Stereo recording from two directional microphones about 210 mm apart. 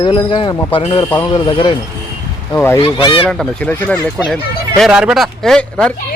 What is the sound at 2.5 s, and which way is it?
A man's voice, 10° left (ahead or behind).